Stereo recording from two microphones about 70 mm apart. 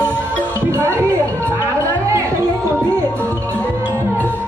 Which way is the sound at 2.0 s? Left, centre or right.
Right.